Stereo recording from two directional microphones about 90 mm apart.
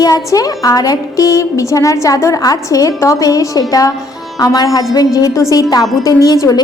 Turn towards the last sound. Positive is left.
turn(degrees=45)  # may be behind; listen again after turning